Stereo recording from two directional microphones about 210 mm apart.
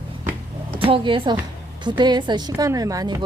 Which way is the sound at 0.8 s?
25° right (ahead or behind).